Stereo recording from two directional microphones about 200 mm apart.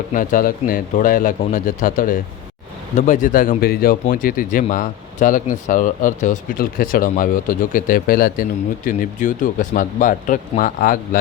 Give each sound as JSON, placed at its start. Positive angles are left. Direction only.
{"t": 0.1, "sound": "a man's voice", "side_deg": 40}